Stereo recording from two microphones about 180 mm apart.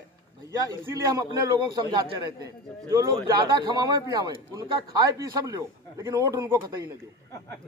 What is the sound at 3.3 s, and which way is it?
A man's voice, 25° right (ahead or behind).